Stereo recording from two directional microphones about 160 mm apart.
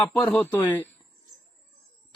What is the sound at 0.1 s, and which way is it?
Speech, 5° left (ahead or behind).